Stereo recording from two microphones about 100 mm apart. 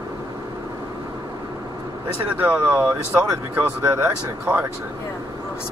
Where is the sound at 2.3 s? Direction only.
20° right (ahead or behind).